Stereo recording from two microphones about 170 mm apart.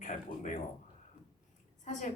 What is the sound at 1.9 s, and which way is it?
Speech, 45° left (ahead or behind).